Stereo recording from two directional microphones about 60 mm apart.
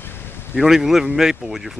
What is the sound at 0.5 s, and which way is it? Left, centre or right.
A man's voice, centre.